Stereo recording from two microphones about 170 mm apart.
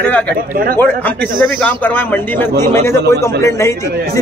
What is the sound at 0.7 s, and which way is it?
Speech, 10° left (ahead or behind).